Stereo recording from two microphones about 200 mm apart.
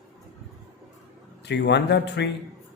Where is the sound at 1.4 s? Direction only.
60° left (ahead or behind).